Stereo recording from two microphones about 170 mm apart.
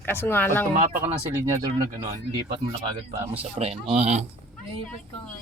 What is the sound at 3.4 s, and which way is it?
Speech, 35° right (ahead or behind).